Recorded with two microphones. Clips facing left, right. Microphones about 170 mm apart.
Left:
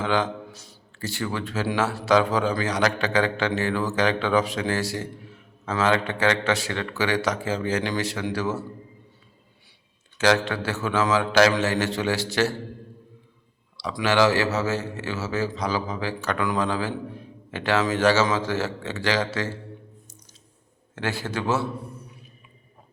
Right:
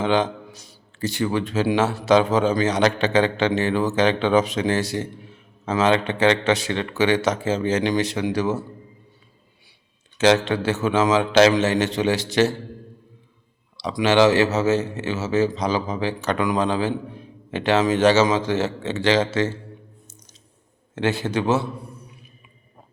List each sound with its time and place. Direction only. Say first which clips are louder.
0.0 s a man's voice: right 4 dB; 20° right (ahead or behind)
10.2 s a man's voice: right 4 dB; 20° right (ahead or behind)
13.7 s a man's voice: right 4 dB; 20° right (ahead or behind)
20.9 s a man's voice: right 6 dB; 20° right (ahead or behind)